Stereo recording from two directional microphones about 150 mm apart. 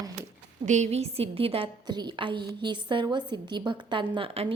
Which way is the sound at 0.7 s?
50° right (ahead or behind).